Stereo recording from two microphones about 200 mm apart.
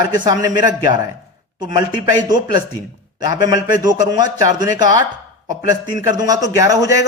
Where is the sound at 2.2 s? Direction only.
20° right (ahead or behind).